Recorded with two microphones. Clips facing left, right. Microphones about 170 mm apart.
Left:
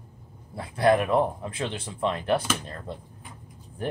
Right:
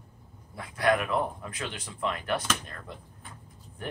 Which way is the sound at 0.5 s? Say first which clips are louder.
Left 5 dB; 30° left (ahead or behind).